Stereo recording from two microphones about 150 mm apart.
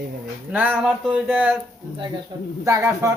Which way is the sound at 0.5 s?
10° right (ahead or behind).